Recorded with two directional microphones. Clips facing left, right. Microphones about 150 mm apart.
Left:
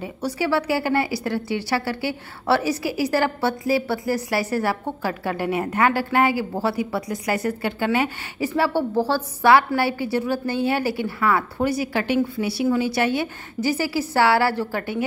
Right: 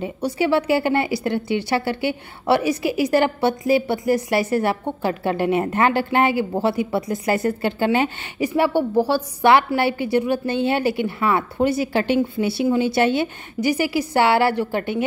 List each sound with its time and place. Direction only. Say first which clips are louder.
0.0 s a woman's voice: right 3 dB; 20° right (ahead or behind)